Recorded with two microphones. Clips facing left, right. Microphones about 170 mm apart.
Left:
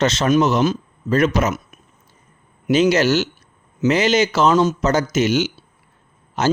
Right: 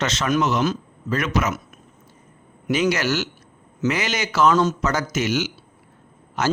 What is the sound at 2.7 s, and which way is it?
A man's voice, 25° left (ahead or behind).